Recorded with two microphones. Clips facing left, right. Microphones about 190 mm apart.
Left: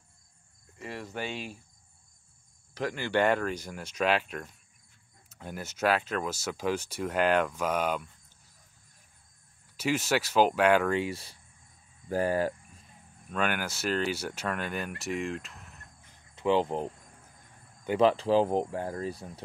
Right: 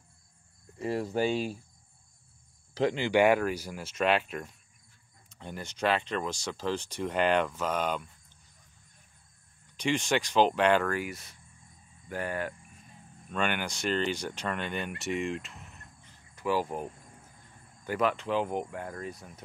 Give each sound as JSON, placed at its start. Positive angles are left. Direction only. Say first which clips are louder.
{"t": 0.7, "sound": "speech", "louder": "right 8 dB", "side_deg": -35}
{"t": 2.7, "sound": "speech", "louder": "right 4 dB", "side_deg": -25}
{"t": 9.8, "sound": "speech", "louder": "even", "side_deg": 5}
{"t": 10.9, "sound": "speech", "louder": "left 4 dB", "side_deg": 25}
{"t": 13.3, "sound": "speech", "louder": "left 1 dB", "side_deg": 5}
{"t": 16.3, "sound": "speech", "louder": "left 4 dB", "side_deg": 20}